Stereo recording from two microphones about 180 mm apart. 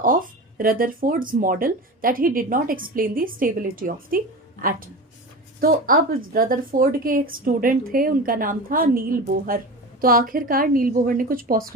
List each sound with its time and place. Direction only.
0.0 s a woman's voice: 50° right (ahead or behind)
5.5 s a woman's voice: 50° right (ahead or behind)